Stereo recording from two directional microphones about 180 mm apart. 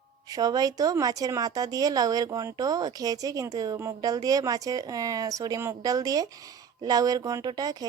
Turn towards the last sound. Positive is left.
turn(degrees=-20)  # may be behind; listen again after turning